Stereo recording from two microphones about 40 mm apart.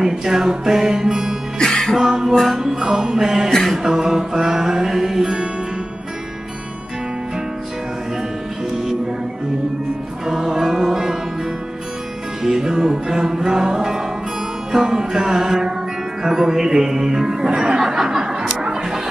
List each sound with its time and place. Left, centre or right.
0.0 s music: centre
10.2 s music: centre
12.4 s music: centre
17.5 s snicker: centre